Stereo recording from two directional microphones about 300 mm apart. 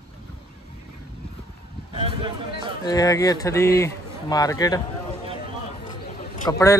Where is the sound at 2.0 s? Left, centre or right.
Centre.